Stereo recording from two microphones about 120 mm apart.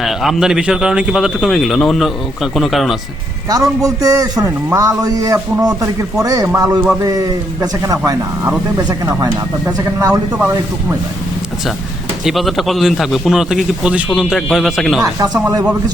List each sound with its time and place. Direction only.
0.0 s a man's voice: centre (ahead or behind)
3.5 s a man's voice: 30° right (ahead or behind)
12.2 s a man's voice: centre (ahead or behind)
15.0 s a man's voice: 30° right (ahead or behind)